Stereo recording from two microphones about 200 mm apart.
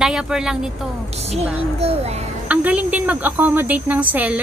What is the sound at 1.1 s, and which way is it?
A child's voice, 30° right (ahead or behind).